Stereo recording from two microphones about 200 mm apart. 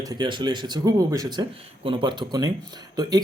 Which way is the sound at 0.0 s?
20° right (ahead or behind).